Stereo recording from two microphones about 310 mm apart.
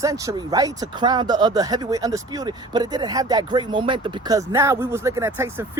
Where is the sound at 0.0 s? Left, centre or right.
Centre.